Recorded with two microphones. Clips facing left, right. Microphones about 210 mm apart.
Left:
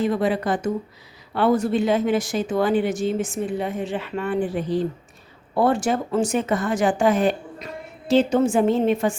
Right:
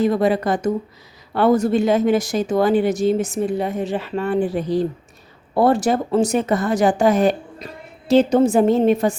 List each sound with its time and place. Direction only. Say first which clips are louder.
0.0 s a woman's voice: right 4 dB; 40° right (ahead or behind)